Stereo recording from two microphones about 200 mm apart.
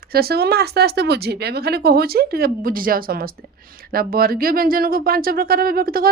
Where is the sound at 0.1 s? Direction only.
50° right (ahead or behind).